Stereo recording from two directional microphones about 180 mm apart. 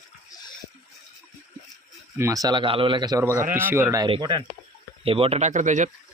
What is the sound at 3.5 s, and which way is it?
Speech, 15° right (ahead or behind).